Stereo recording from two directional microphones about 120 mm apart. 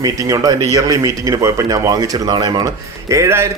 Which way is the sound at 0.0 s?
30° right (ahead or behind).